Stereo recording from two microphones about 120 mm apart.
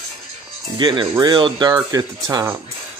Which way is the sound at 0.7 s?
40° right (ahead or behind).